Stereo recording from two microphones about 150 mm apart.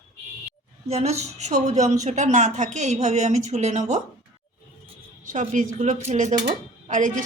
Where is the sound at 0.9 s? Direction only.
45° right (ahead or behind).